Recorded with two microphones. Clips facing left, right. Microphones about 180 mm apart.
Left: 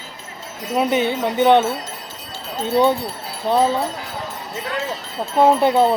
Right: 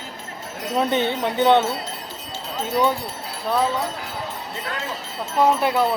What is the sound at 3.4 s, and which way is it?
Wind chime, 30° left (ahead or behind).